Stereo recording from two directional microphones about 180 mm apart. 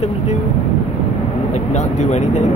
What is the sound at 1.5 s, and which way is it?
Speech, 40° left (ahead or behind).